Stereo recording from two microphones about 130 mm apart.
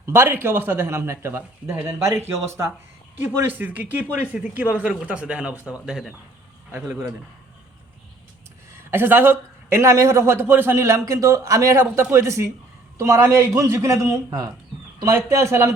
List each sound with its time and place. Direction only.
0.0 s a man's voice: 20° right (ahead or behind)
8.9 s a man's voice: 15° right (ahead or behind)